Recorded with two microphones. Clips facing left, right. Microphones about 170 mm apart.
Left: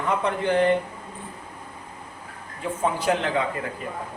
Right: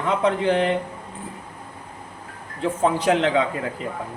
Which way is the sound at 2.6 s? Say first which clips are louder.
Right 4 dB; 90° right.